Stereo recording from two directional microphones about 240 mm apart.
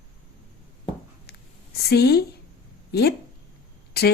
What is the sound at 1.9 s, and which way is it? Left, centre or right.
A woman's voice, left.